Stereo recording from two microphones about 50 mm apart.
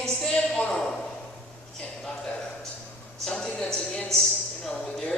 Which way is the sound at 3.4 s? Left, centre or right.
Centre.